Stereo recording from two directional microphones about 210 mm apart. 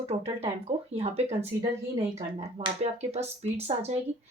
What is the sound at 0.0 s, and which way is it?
Speech, 30° right (ahead or behind).